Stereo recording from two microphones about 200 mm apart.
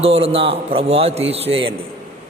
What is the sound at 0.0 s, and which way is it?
A man's voice, 30° right (ahead or behind).